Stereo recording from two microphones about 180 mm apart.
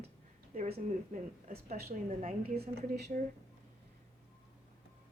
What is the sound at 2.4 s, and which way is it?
Speech, 60° right (ahead or behind).